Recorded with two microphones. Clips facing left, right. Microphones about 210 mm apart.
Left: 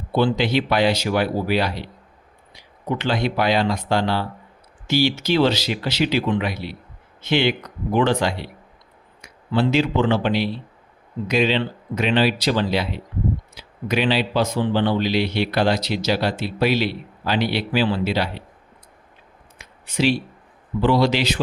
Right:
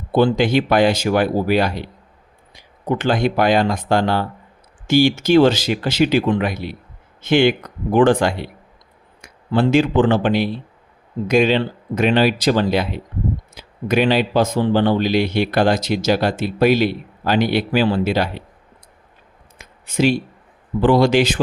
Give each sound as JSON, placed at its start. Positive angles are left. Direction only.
{"t": 0.1, "sound": "speech", "side_deg": -45}
{"t": 19.5, "sound": "a sound", "side_deg": -45}
{"t": 20.8, "sound": "speech", "side_deg": -50}